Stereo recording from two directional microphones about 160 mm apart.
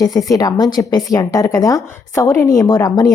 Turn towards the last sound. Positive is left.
turn(degrees=25)  # may be behind; listen again after turning